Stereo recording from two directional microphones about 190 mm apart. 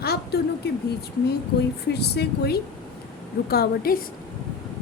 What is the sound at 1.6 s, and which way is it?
A woman's voice, 60° left (ahead or behind).